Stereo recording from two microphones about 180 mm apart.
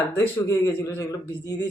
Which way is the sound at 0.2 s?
15° left (ahead or behind).